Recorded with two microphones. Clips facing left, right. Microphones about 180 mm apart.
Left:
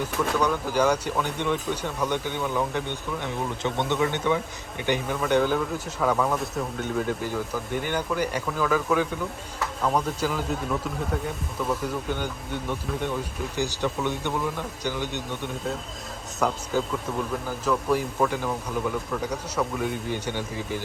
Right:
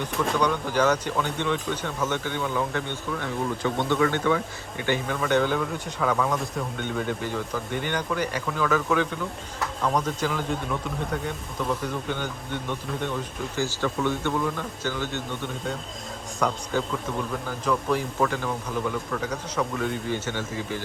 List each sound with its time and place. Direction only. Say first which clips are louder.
0.0 s a man's voice: even; 5° left (ahead or behind)
16.4 s a man's voice: even; 5° left (ahead or behind)
17.7 s speech: left 1 dB; 5° left (ahead or behind)